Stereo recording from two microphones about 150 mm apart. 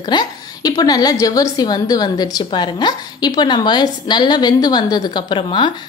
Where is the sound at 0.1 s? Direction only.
25° left (ahead or behind).